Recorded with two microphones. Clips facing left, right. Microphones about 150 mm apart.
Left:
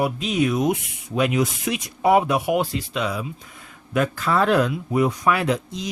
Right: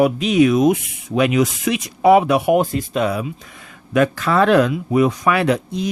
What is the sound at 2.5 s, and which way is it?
Speech, 50° right (ahead or behind).